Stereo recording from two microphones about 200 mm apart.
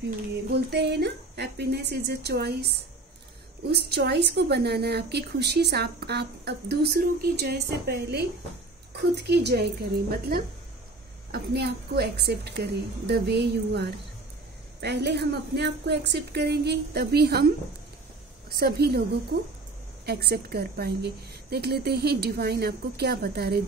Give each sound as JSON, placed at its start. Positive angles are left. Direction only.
{"t": 0.5, "sound": "a woman's voice", "side_deg": -55}
{"t": 18.6, "sound": "a woman's voice", "side_deg": -50}
{"t": 20.1, "sound": "a woman's voice", "side_deg": -55}